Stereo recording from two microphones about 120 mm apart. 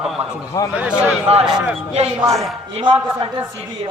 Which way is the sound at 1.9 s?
60° right (ahead or behind).